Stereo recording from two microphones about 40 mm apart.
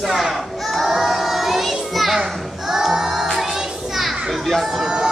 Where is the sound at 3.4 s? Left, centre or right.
Centre.